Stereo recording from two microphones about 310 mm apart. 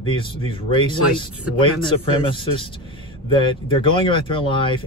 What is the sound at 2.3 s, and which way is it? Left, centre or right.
Speech, centre.